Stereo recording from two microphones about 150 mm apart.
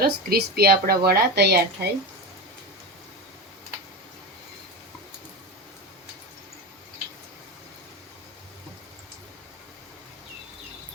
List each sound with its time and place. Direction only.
0.0 s speech: 90° right